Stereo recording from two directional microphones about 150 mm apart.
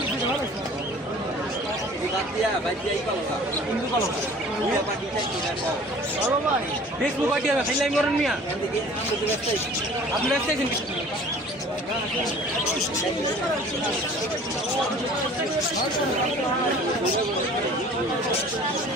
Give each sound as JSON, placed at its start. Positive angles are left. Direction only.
{"t": 7.8, "sound": "a man's voice", "side_deg": 0}